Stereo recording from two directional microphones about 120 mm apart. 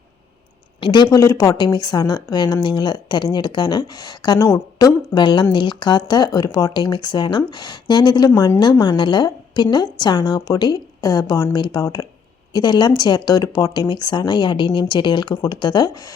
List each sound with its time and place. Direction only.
0.8 s speech: 40° left (ahead or behind)
1.1 s speech: 25° left (ahead or behind)
1.5 s speech: 35° left (ahead or behind)
4.4 s a woman's voice: 25° left (ahead or behind)
5.1 s speech: 40° left (ahead or behind)